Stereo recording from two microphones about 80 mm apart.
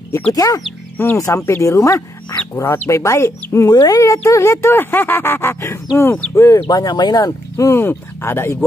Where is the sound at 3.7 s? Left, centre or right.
Left.